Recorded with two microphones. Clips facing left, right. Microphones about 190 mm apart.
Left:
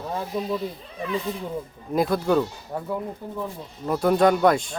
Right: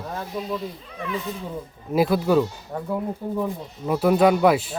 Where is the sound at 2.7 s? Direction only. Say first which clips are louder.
Even; 5° left (ahead or behind).